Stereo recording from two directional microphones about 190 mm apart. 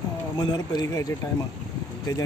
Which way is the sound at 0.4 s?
20° left (ahead or behind).